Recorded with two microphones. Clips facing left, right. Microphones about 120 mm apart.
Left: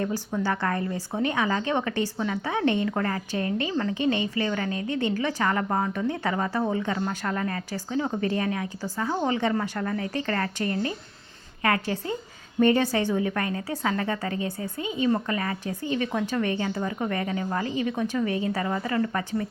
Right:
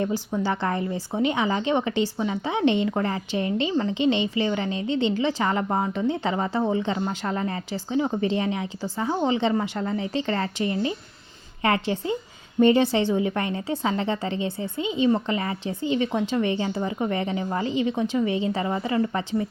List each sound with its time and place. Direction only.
0.3 s speech: 20° right (ahead or behind)